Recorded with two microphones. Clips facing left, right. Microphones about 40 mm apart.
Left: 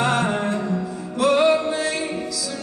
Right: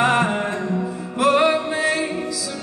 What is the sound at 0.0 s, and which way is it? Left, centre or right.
Music, right.